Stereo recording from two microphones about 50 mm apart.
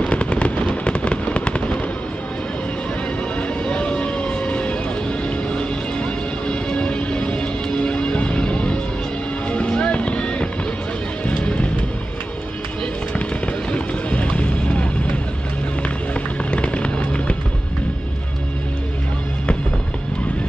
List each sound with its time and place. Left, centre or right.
0.0 s fireworks: left
3.3 s music: left
13.7 s music: left
16.4 s fireworks: left